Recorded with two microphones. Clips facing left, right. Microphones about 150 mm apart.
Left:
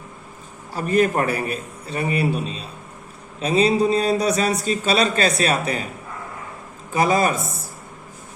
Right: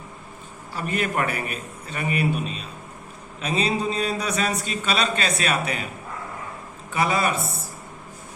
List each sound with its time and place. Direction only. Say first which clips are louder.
0.7 s a man's voice: left 7 dB; 40° left (ahead or behind)
6.9 s a man's voice: left 4 dB; 40° left (ahead or behind)